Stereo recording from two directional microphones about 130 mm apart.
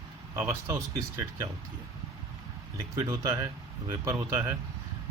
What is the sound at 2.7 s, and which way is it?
Speech, 25° right (ahead or behind).